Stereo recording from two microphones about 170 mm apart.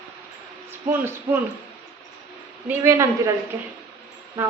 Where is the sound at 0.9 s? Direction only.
10° right (ahead or behind).